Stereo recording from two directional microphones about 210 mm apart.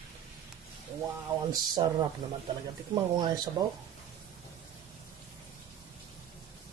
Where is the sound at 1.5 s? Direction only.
20° right (ahead or behind).